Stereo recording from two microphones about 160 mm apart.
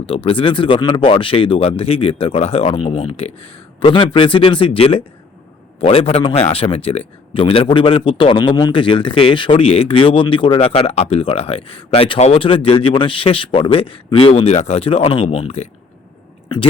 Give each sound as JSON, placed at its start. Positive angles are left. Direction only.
{"t": 0.0, "sound": "speech", "side_deg": 35}